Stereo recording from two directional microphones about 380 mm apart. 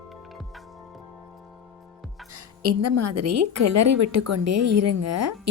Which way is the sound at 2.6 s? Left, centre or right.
Right.